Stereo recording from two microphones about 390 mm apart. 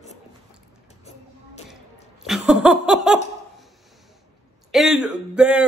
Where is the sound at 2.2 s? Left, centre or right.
Centre.